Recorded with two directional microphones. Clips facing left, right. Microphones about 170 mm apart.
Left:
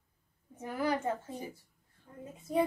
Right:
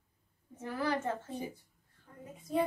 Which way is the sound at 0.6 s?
15° left (ahead or behind).